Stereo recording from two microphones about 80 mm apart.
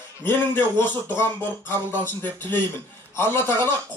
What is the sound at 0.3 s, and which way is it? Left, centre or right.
Speech, left.